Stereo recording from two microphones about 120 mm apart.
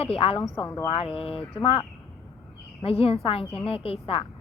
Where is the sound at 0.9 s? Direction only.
55° left (ahead or behind).